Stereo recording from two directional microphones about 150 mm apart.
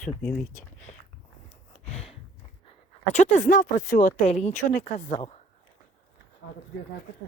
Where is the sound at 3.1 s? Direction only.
55° left (ahead or behind).